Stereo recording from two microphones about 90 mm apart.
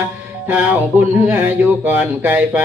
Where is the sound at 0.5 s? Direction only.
15° right (ahead or behind).